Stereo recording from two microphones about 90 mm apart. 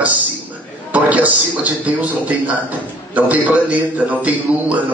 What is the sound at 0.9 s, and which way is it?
A man's voice, 15° right (ahead or behind).